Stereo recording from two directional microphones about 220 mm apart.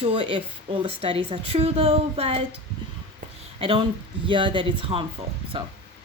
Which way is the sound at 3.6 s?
25° right (ahead or behind).